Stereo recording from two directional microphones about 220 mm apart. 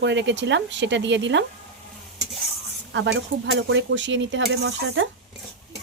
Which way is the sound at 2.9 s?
55° right (ahead or behind).